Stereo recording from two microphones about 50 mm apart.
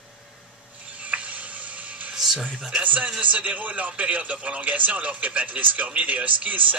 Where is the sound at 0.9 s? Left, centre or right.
Right.